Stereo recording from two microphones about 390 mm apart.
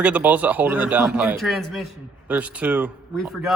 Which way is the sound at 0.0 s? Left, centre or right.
Centre.